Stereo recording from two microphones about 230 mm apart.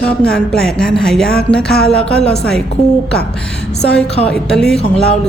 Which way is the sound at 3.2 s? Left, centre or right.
Left.